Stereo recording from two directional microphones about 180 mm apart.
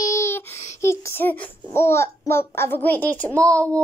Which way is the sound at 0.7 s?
15° left (ahead or behind).